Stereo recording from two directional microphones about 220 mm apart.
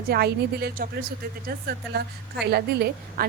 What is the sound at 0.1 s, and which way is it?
A woman's voice, 45° right (ahead or behind).